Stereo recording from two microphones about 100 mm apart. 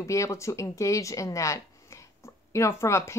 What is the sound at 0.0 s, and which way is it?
Speech, 30° left (ahead or behind).